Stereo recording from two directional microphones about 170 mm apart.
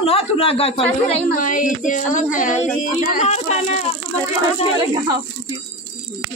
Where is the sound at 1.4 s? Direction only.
50° left (ahead or behind).